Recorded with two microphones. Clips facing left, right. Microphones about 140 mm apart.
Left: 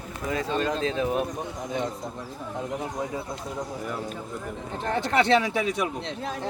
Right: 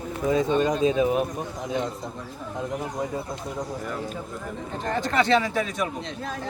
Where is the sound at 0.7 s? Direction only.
10° right (ahead or behind).